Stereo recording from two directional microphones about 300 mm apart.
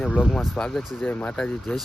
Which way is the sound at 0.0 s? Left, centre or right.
Centre.